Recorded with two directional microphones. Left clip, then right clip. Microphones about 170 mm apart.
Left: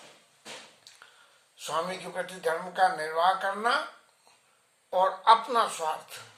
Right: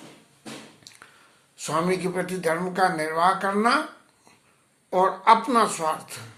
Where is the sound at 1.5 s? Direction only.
15° right (ahead or behind).